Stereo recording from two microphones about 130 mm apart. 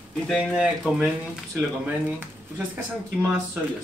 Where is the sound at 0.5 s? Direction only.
5° right (ahead or behind).